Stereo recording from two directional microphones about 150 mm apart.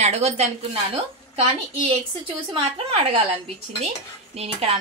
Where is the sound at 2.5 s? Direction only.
35° right (ahead or behind).